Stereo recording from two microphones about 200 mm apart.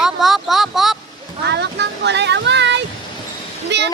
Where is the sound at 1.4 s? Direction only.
60° right (ahead or behind).